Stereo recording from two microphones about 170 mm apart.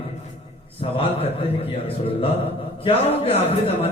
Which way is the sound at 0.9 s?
35° left (ahead or behind).